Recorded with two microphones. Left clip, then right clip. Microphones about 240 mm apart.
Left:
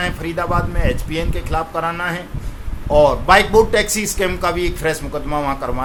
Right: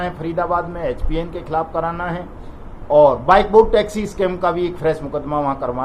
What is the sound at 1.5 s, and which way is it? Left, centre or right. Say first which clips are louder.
Speech: even; left.